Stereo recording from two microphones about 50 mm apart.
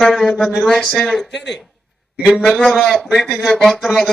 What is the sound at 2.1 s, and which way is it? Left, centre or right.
Speech, centre.